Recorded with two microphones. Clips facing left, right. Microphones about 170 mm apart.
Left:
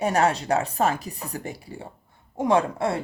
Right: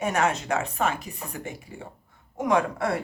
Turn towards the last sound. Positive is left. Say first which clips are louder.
# left 2 dB
turn(degrees=25)  # may be behind; listen again after turning